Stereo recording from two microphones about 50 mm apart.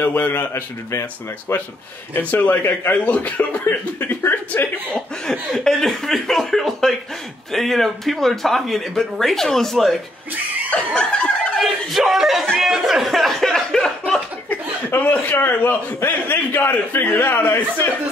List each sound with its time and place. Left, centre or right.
0.0 s speech: left
1.5 s a man's voice: left
2.3 s a man's voice: left
3.6 s speech: left
4.9 s speech: centre
11.0 s snicker: left
11.6 s speech: centre
12.5 s music: centre
15.0 s a man's voice: left